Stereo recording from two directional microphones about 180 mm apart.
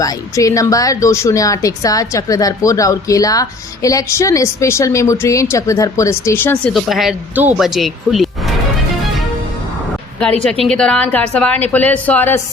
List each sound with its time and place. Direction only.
0.0 s a woman's voice: 20° left (ahead or behind); by 8.3 s centre (ahead or behind)
10.2 s a woman's voice: 5° left (ahead or behind)